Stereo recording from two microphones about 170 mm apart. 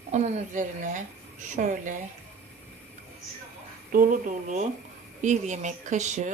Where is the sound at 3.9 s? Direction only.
55° right (ahead or behind).